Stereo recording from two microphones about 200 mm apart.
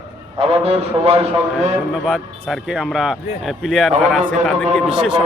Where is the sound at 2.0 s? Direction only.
Centre (ahead or behind).